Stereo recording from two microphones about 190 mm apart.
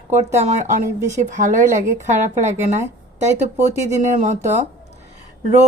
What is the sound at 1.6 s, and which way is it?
Speech, 15° right (ahead or behind).